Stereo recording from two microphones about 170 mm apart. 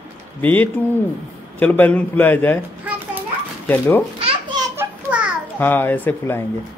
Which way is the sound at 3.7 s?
10° left (ahead or behind).